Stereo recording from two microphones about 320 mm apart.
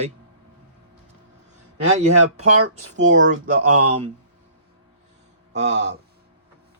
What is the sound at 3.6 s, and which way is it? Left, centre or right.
Speech, right.